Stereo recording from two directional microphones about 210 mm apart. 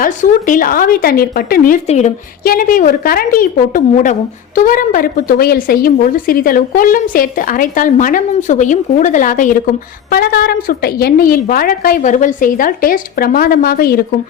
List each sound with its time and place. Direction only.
0.0 s a woman's voice: 40° left (ahead or behind)